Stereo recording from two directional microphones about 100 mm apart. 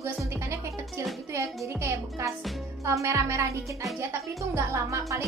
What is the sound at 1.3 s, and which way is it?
A woman's voice, 30° right (ahead or behind).